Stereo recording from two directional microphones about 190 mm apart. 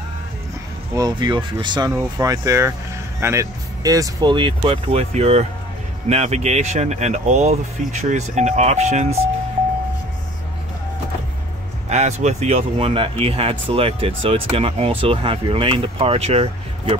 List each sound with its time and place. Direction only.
0.9 s speech: 20° right (ahead or behind)
11.9 s speech: 35° right (ahead or behind)